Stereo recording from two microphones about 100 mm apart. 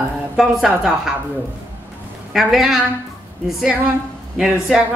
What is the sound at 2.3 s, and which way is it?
Speech, 5° right (ahead or behind).